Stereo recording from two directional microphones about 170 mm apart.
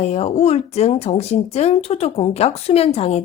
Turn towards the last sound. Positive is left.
turn(degrees=35)  # may be behind; listen again after turning